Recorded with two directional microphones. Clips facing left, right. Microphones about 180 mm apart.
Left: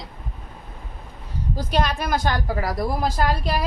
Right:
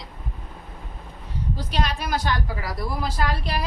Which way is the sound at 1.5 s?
50° left (ahead or behind).